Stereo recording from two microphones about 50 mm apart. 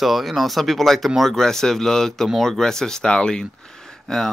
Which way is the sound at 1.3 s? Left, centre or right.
Centre.